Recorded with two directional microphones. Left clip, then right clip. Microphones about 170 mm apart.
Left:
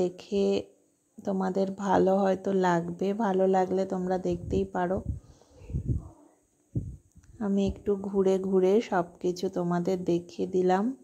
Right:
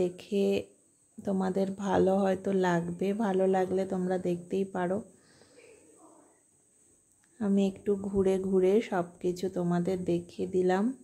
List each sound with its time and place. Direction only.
0.0 s speech: 10° left (ahead or behind)
7.3 s speech: 5° left (ahead or behind)